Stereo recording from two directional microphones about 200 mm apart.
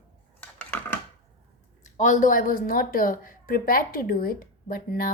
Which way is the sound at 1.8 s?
40° left (ahead or behind).